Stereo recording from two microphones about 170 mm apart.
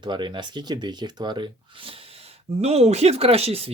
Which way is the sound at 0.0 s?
25° right (ahead or behind).